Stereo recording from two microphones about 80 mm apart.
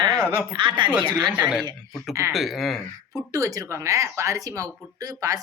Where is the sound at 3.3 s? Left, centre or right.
Right.